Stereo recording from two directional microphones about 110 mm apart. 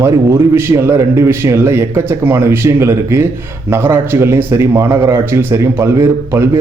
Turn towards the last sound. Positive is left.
turn(degrees=-25)  # may be behind; listen again after turning